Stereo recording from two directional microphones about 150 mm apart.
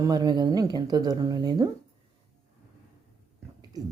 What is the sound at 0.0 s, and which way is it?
Speech, 25° right (ahead or behind).